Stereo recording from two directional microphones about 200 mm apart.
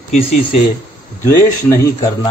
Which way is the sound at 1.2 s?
15° left (ahead or behind).